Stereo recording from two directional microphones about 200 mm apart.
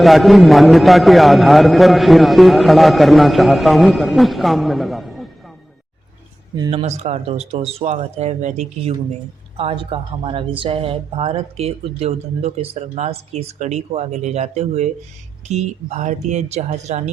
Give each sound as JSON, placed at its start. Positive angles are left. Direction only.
{"t": 0.0, "sound": "a man's voice", "side_deg": 0}
{"t": 6.6, "sound": "speech", "side_deg": -30}